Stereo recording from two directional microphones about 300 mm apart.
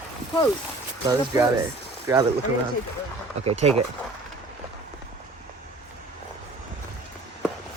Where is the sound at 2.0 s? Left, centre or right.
Centre.